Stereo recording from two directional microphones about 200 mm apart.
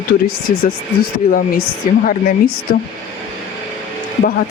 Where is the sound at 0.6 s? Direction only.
50° left (ahead or behind).